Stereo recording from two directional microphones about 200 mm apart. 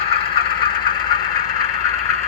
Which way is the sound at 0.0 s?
30° left (ahead or behind).